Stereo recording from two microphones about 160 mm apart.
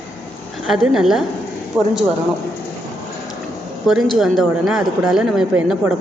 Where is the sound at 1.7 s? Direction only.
15° right (ahead or behind).